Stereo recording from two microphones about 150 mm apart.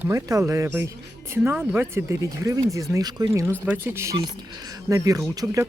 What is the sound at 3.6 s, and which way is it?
Speech, 10° right (ahead or behind).